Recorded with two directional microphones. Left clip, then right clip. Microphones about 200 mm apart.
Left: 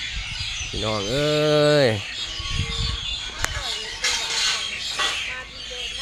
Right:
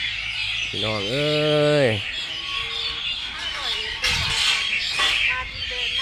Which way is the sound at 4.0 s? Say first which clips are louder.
Right 1 dB; 55° right (ahead or behind).